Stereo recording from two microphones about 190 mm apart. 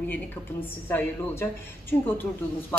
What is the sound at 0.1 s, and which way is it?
A woman's voice, 10° left (ahead or behind).